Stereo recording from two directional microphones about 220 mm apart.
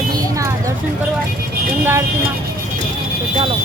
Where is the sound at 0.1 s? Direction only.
15° right (ahead or behind).